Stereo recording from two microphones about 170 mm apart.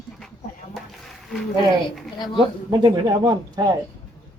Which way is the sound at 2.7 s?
25° right (ahead or behind).